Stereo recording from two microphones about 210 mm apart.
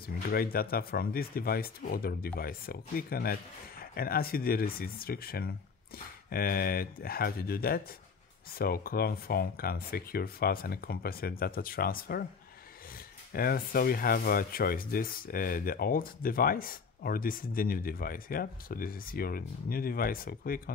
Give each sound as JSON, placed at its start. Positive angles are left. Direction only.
{"t": 0.0, "sound": "speech", "side_deg": 45}